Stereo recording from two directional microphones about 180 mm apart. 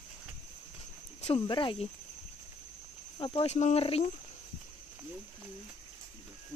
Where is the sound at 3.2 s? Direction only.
30° left (ahead or behind).